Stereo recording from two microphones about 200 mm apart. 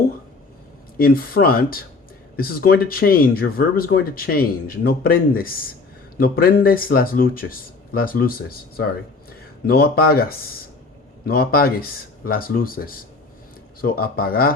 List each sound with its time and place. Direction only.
0.9 s speech: 45° left (ahead or behind)